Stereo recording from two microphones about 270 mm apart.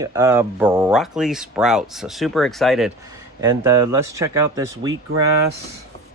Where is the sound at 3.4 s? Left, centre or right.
Centre.